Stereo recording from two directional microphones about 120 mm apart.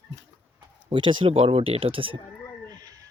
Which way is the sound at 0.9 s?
45° right (ahead or behind).